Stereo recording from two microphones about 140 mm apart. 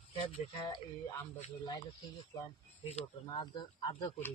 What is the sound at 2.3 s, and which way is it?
Speech, 30° left (ahead or behind).